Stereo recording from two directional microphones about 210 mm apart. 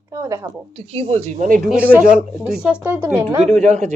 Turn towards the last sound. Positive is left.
turn(degrees=-35)  # may be behind; listen again after turning